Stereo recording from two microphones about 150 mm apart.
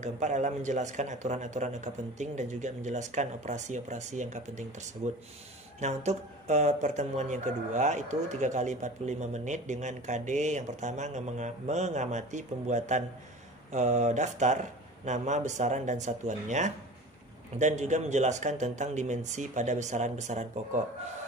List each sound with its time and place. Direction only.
0.0 s speech: 50° right (ahead or behind)